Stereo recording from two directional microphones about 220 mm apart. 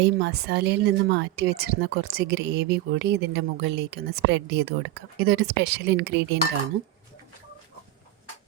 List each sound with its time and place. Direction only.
0.0 s speech: 50° right (ahead or behind)